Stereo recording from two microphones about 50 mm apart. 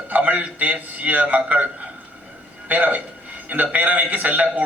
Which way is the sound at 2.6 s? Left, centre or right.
Right.